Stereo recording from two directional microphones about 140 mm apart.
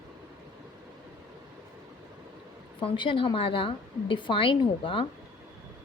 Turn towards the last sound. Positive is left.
turn(degrees=40)  # may be behind; listen again after turning